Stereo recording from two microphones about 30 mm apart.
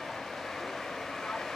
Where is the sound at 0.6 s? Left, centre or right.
Centre.